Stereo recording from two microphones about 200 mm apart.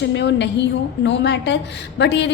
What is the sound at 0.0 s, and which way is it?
A woman's voice, 60° left (ahead or behind).